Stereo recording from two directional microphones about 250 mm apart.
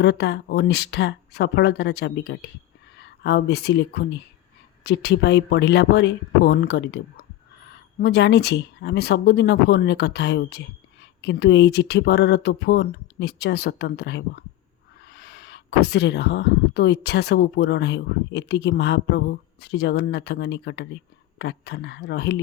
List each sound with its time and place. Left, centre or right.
0.0 s speech: left